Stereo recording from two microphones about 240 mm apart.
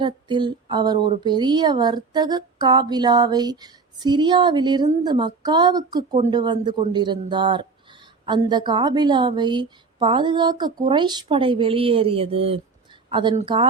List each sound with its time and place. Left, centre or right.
0.0 s a woman's voice: centre